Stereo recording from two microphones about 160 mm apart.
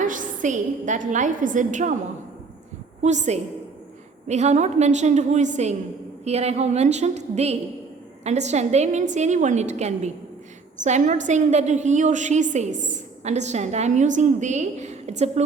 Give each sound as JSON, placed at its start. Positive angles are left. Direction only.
{"t": 0.0, "sound": "a woman's voice", "side_deg": -55}
{"t": 3.0, "sound": "a woman's voice", "side_deg": -45}